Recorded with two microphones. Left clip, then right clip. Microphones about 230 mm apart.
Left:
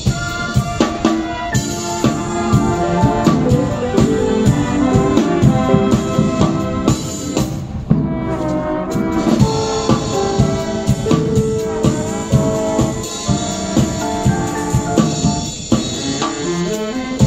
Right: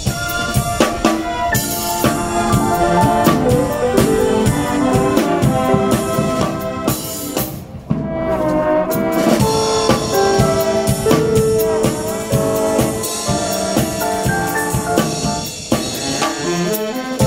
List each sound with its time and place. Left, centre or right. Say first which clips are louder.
2.0 s music: right 2 dB; right
8.5 s brass instrument: right 4 dB; right
12.4 s music: right 1 dB; right
13.3 s music: right 3 dB; right